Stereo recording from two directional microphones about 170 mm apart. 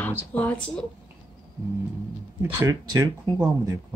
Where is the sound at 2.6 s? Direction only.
20° right (ahead or behind).